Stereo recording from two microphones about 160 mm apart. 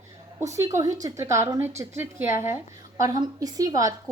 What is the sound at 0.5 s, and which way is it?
A woman's voice, 20° right (ahead or behind).